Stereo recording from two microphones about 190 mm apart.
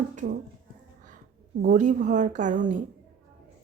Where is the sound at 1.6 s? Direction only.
40° right (ahead or behind).